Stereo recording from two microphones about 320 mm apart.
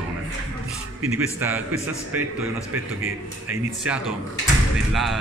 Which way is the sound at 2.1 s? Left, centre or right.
Centre.